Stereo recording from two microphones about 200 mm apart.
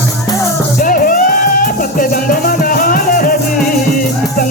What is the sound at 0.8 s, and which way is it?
Music, 45° left (ahead or behind).